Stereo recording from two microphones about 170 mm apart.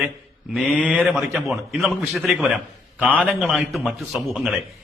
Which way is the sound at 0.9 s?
Centre (ahead or behind).